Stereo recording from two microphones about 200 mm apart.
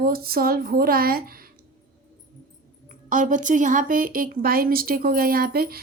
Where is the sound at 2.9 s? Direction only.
40° right (ahead or behind).